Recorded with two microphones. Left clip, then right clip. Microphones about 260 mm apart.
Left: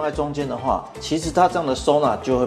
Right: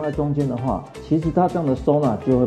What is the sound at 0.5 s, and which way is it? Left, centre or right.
Speech, left.